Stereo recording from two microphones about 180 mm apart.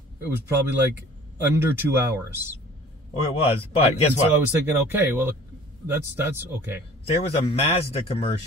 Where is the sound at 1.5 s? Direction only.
10° right (ahead or behind).